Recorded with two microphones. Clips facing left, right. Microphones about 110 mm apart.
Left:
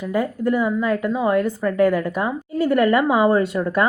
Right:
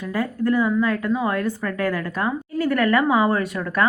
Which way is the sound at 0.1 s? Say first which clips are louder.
Left 1 dB; 15° left (ahead or behind).